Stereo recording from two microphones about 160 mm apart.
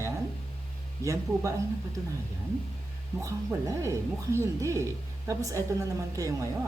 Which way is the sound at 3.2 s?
20° right (ahead or behind).